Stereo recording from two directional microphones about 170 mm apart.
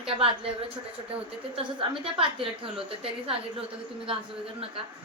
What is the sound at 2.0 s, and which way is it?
A woman's voice, 30° right (ahead or behind).